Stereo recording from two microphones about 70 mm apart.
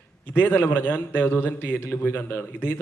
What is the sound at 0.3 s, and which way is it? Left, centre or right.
A man's voice, left.